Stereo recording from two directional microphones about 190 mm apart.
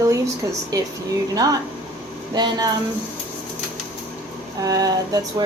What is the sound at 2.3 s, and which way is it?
Speech, 20° right (ahead or behind).